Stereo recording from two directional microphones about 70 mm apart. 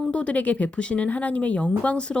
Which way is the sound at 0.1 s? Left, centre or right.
Centre.